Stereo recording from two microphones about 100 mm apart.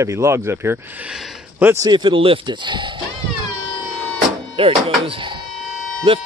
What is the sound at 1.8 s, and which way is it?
Speech, 45° right (ahead or behind).